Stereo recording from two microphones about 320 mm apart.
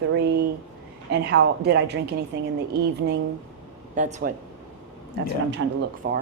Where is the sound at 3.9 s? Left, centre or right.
Right.